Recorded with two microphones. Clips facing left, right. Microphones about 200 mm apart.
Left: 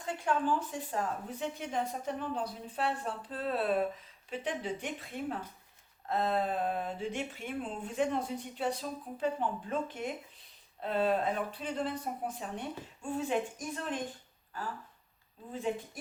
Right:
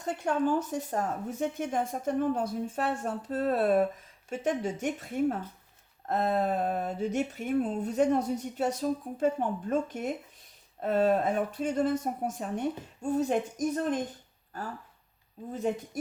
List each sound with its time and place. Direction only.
0.0 s speech: 40° right (ahead or behind)